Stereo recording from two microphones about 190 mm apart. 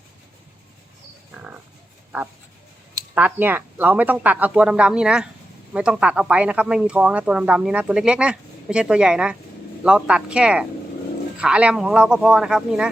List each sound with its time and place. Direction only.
1.3 s pig: 10° right (ahead or behind)
3.2 s speech: 10° right (ahead or behind)